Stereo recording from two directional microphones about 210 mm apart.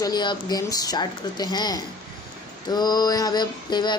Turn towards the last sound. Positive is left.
turn(degrees=20)  # may be behind; listen again after turning